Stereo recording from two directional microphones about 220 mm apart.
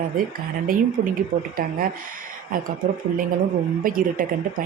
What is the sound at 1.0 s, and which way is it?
Speech, 30° right (ahead or behind).